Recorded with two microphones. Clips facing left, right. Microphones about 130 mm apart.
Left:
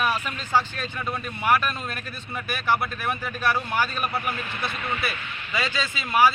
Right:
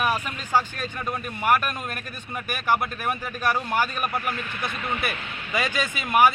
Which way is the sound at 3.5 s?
15° right (ahead or behind).